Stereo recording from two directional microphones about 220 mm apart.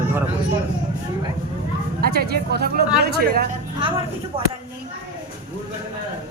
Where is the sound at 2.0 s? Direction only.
45° right (ahead or behind).